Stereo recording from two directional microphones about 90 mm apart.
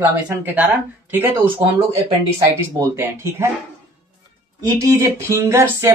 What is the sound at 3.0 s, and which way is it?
Speech, 30° right (ahead or behind).